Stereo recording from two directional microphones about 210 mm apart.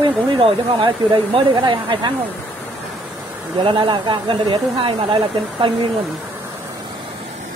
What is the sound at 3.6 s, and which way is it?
Speech, 25° right (ahead or behind).